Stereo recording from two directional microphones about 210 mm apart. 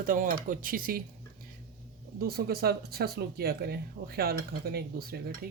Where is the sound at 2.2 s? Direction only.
45° right (ahead or behind).